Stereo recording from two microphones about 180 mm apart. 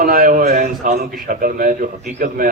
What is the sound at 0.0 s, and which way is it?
A man's voice, 55° right (ahead or behind).